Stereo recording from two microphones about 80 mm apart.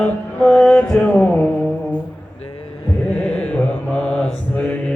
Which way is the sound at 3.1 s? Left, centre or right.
Centre.